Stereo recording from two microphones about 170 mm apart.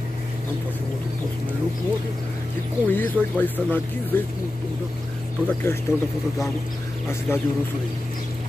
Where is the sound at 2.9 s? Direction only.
10° left (ahead or behind).